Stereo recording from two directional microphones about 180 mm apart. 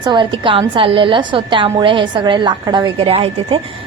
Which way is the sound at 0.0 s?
25° right (ahead or behind).